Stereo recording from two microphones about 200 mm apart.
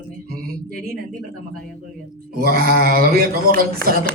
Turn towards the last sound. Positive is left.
turn(degrees=-45)  # may be behind; listen again after turning